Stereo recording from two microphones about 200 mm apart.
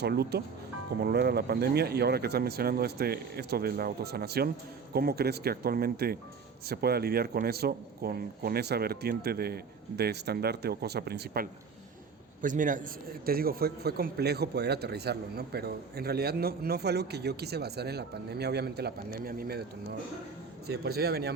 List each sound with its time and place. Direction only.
0.0 s a man's voice: 55° right (ahead or behind)
12.4 s a man's voice: 40° right (ahead or behind)